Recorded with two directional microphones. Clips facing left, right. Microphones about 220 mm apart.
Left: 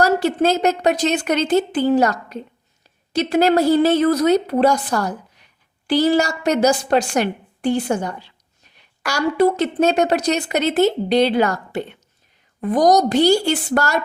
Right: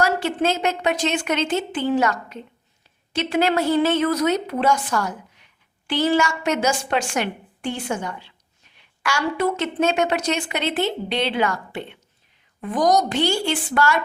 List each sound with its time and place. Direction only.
0.0 s a woman's voice: 40° left (ahead or behind)